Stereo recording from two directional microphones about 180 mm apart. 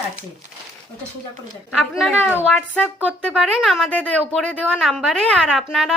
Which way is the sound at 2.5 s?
10° left (ahead or behind).